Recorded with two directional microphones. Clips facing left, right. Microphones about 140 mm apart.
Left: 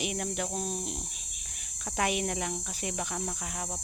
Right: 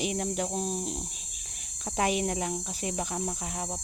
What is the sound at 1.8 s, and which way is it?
Speech, 30° right (ahead or behind).